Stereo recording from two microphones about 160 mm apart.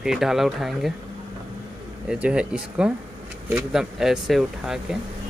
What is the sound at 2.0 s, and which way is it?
Speech, 5° right (ahead or behind).